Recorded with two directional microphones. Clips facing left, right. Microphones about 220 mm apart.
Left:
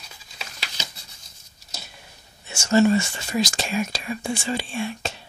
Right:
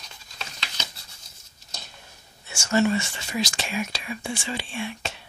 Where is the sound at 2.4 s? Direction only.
20° left (ahead or behind).